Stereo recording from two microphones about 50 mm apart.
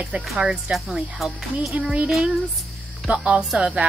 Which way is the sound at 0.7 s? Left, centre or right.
Centre.